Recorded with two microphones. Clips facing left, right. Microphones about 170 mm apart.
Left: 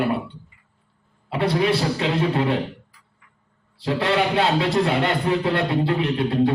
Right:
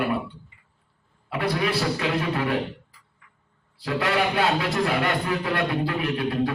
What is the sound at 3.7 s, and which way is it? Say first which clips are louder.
A man's voice: left 3 dB; 25° left (ahead or behind).